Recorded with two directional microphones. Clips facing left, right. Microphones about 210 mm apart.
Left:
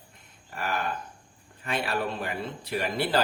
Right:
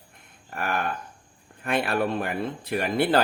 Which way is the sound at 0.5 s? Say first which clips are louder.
Right 3 dB; 55° right (ahead or behind).